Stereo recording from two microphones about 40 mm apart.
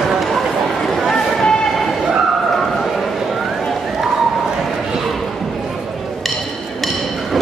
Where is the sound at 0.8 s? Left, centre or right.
Centre.